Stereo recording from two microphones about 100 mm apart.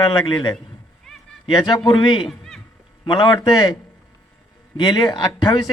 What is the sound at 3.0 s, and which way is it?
Speech, 50° left (ahead or behind).